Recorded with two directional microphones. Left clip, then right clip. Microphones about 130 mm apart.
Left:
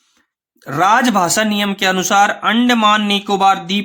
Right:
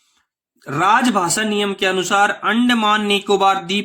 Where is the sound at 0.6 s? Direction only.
25° left (ahead or behind).